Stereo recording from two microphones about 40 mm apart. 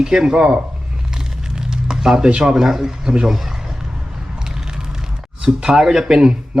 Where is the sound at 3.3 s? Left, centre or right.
Centre.